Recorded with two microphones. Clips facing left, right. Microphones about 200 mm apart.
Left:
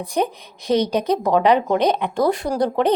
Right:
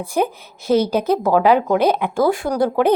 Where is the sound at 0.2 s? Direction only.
5° right (ahead or behind).